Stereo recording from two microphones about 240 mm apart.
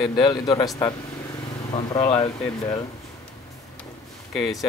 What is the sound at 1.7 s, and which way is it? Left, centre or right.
Speech, left.